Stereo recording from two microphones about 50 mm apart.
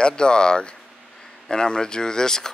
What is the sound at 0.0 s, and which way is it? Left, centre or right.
Speech, centre.